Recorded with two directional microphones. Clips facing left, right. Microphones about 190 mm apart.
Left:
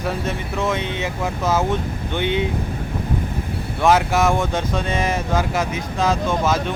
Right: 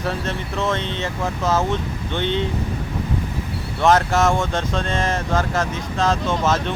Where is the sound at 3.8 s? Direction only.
10° left (ahead or behind).